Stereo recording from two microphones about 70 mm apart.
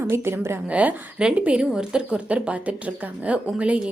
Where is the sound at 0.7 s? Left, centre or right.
Centre.